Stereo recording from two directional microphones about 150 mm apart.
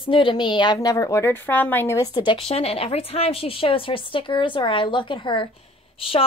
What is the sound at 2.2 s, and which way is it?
A woman's voice, 35° left (ahead or behind).